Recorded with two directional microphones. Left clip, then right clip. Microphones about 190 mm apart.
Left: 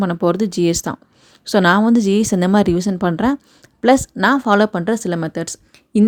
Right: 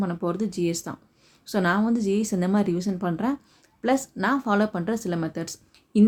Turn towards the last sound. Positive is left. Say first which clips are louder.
# left 6 dB
turn(degrees=45)  # may be behind; listen again after turning